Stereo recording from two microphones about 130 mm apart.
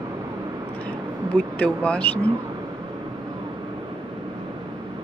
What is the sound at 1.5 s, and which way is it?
Speech, 10° left (ahead or behind).